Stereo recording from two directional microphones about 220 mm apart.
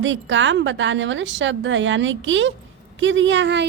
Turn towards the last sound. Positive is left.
turn(degrees=-55)  # may be behind; listen again after turning